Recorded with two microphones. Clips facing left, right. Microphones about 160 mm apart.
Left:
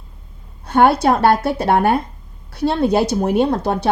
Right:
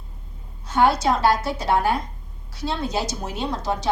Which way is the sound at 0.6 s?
60° left (ahead or behind).